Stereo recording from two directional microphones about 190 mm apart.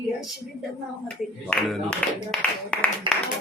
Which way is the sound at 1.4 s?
5° left (ahead or behind).